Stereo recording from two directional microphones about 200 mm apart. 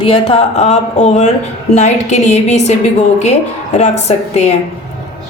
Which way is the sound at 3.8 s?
35° left (ahead or behind).